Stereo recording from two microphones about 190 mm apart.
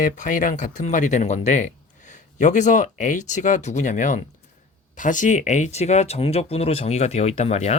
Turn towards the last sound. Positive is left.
turn(degrees=35)  # may be behind; listen again after turning